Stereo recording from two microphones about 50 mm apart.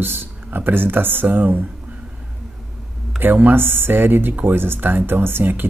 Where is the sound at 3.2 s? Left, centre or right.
Right.